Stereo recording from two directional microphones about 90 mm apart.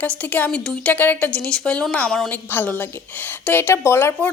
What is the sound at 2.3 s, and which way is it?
A woman's voice, 20° left (ahead or behind).